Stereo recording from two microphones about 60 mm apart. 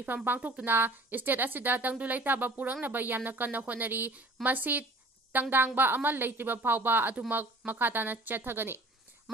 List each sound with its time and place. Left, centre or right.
0.0 s a woman's voice: right